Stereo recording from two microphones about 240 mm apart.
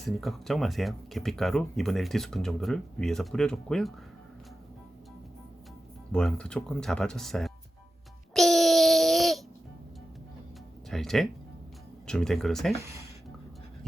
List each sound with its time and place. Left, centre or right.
0.0 s speech: centre
6.1 s speech: centre
8.3 s a sound: centre
10.8 s speech: centre